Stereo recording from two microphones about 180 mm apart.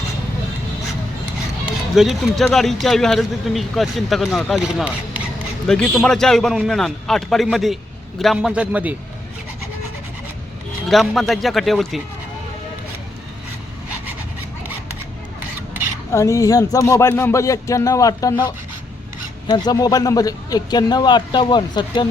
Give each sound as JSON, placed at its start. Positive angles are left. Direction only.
{"t": 2.0, "sound": "speech", "side_deg": 0}
{"t": 5.6, "sound": "a man's voice", "side_deg": 5}
{"t": 10.8, "sound": "speech", "side_deg": 0}
{"t": 16.1, "sound": "speech", "side_deg": 15}
{"t": 19.5, "sound": "speech", "side_deg": 20}